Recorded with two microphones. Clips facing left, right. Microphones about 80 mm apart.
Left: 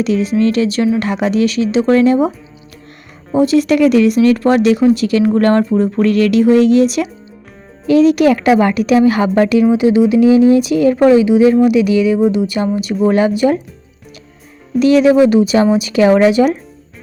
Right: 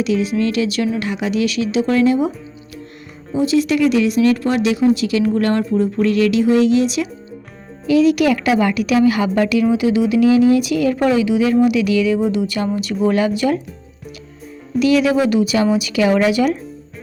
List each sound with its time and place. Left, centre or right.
0.0 s a woman's voice: left
3.3 s speech: left
5.7 s a woman's voice: left
14.8 s a woman's voice: left